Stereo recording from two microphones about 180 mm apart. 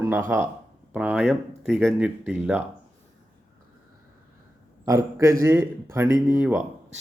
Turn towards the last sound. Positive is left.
turn(degrees=-10)  # may be behind; listen again after turning